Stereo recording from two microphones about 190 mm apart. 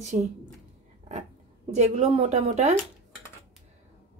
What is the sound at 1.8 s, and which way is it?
Speech, 35° right (ahead or behind).